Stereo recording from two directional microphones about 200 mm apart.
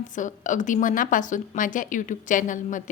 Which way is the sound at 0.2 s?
40° left (ahead or behind).